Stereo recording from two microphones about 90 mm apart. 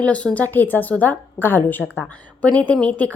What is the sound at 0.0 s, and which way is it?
A woman's voice, 15° left (ahead or behind).